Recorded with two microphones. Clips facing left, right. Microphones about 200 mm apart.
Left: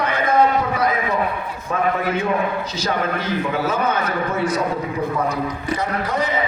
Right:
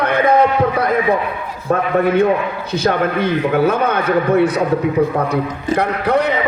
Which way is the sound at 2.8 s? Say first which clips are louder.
Right 8 dB; 60° right (ahead or behind).